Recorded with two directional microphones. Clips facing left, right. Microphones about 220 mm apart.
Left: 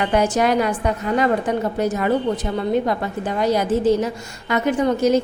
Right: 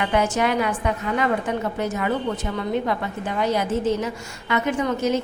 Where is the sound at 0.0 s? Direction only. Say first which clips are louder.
Left 3 dB; 35° left (ahead or behind).